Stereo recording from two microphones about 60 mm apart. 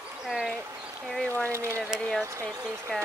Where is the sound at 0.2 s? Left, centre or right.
Centre.